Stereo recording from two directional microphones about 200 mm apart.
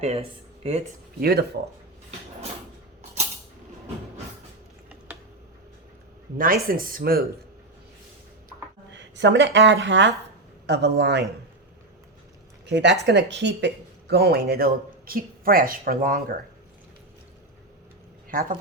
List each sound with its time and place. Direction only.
0.0 s speech: 30° right (ahead or behind)
1.2 s speech: 50° right (ahead or behind)
6.3 s speech: 45° right (ahead or behind)
8.9 s speech: 65° right (ahead or behind)
12.6 s speech: 60° right (ahead or behind); by 16.1 s 45° right (ahead or behind)
18.3 s speech: 45° right (ahead or behind)